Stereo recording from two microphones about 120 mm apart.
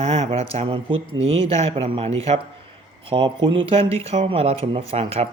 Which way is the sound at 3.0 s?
45° right (ahead or behind).